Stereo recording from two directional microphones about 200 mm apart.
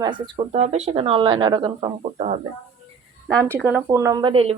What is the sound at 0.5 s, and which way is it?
Speech, 30° right (ahead or behind).